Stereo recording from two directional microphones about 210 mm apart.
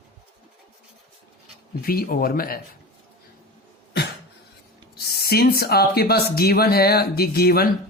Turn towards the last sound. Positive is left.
turn(degrees=45)  # may be behind; listen again after turning